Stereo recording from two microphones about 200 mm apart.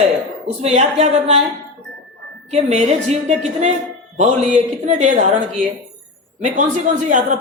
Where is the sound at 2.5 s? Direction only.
30° right (ahead or behind).